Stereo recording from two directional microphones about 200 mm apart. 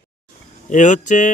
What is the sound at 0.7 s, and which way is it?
Speech, 40° left (ahead or behind).